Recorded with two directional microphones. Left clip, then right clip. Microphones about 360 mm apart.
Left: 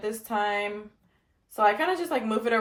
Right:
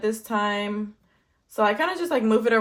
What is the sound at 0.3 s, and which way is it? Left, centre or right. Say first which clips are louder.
Speech: right 1 dB; right.